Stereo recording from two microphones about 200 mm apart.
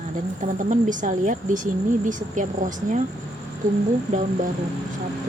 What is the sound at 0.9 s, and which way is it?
Speech, 40° right (ahead or behind).